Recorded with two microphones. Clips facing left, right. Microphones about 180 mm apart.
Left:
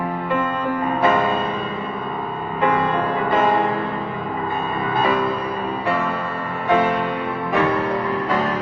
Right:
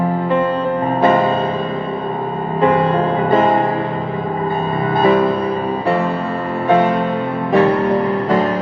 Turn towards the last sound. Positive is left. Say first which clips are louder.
# right 6 dB
turn(degrees=-30)  # may be behind; listen again after turning